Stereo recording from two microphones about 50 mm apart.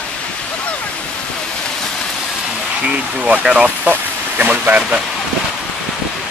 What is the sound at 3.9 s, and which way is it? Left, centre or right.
Speech, right.